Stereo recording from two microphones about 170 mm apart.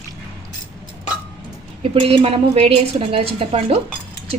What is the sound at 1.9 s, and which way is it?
A woman's voice, 35° right (ahead or behind).